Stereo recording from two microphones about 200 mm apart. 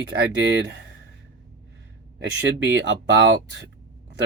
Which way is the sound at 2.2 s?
60° right (ahead or behind).